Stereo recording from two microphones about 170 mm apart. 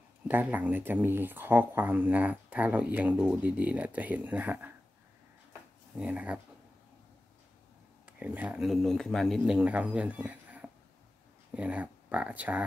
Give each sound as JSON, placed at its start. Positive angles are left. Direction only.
{"t": 0.3, "sound": "speech", "side_deg": -10}
{"t": 5.9, "sound": "speech", "side_deg": -10}
{"t": 8.2, "sound": "speech", "side_deg": -5}